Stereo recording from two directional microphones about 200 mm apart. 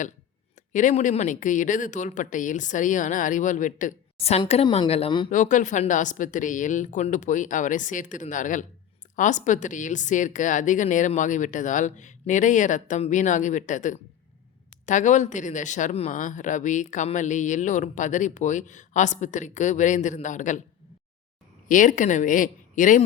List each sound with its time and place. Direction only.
0.7 s speech: 40° left (ahead or behind)
5.3 s speech: 40° left (ahead or behind)
21.7 s speech: 40° left (ahead or behind)